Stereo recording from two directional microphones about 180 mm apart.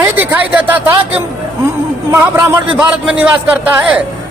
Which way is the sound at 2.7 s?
5° right (ahead or behind).